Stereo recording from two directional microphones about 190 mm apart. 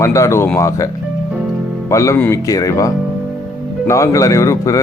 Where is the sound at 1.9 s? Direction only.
15° left (ahead or behind).